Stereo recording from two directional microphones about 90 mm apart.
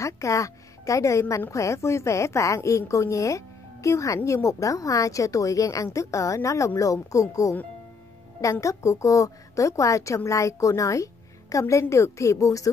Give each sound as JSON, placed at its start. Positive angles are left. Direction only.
{"t": 0.0, "sound": "speech", "side_deg": 35}